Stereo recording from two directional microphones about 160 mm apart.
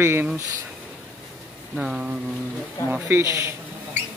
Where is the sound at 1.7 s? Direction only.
5° right (ahead or behind).